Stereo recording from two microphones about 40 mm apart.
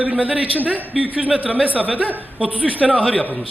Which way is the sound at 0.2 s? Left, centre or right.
Right.